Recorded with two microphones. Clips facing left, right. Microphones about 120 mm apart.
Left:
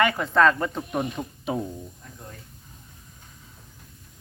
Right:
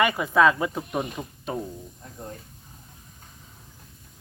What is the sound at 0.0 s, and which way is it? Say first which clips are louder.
Speech: even; 10° right (ahead or behind).